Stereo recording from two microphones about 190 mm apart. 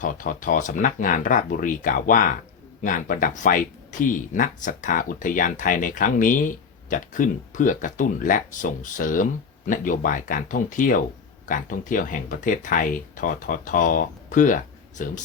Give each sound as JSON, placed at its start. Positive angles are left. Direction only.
{"t": 0.0, "sound": "speech", "side_deg": 45}